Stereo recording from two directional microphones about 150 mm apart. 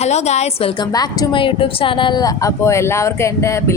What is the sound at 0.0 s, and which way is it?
A woman's voice, 50° left (ahead or behind).